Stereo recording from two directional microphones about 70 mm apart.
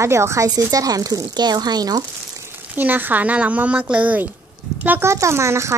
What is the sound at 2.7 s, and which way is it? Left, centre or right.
A woman's voice, right.